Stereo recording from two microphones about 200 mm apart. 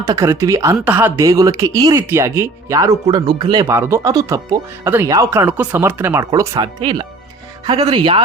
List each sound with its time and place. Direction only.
0.0 s speech: 15° right (ahead or behind)